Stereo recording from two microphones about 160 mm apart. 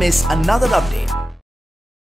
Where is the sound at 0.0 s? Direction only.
Centre (ahead or behind).